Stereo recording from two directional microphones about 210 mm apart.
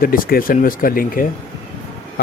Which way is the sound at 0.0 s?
45° left (ahead or behind).